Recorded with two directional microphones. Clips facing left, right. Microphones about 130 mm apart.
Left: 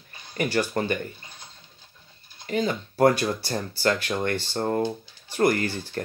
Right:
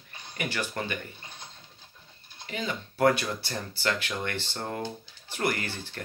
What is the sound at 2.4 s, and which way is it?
Speech, 40° left (ahead or behind).